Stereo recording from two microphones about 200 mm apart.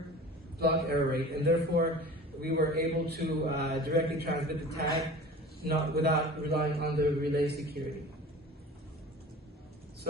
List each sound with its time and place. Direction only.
0.6 s a man's voice: 50° right (ahead or behind)